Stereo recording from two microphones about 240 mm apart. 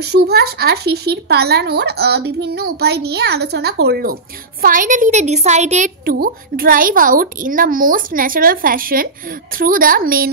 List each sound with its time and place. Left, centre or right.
0.0 s speech: right
6.0 s speech: right